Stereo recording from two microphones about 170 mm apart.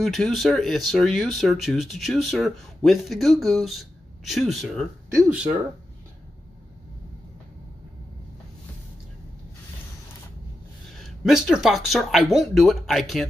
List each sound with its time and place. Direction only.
0.0 s speech: centre (ahead or behind)
11.0 s speech: centre (ahead or behind)